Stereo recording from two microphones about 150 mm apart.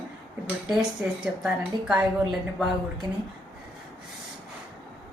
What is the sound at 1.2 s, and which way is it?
Speech, 5° right (ahead or behind).